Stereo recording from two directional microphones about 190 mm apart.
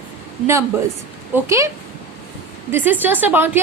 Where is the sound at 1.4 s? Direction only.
15° right (ahead or behind).